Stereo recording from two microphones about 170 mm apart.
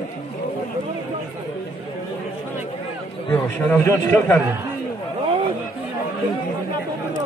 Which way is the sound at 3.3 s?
10° left (ahead or behind).